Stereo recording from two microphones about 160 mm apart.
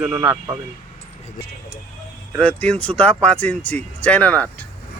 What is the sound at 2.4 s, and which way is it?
Speech, 5° left (ahead or behind).